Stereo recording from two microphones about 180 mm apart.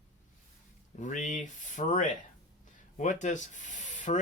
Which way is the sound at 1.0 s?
40° left (ahead or behind).